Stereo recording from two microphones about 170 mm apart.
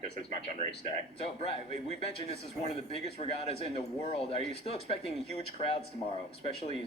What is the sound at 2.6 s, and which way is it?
Speech, 35° left (ahead or behind).